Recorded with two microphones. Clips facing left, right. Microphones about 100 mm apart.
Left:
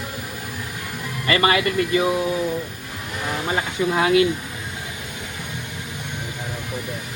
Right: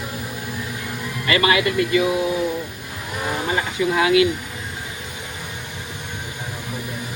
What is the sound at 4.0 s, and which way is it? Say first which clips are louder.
Speech: right 1 dB; 35° left (ahead or behind).